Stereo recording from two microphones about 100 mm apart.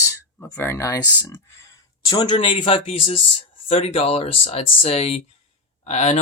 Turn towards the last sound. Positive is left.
turn(degrees=90)